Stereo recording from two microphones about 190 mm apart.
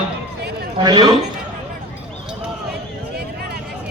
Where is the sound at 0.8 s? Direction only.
20° right (ahead or behind).